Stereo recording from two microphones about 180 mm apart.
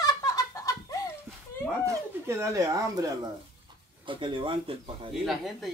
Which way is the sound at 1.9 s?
15° right (ahead or behind).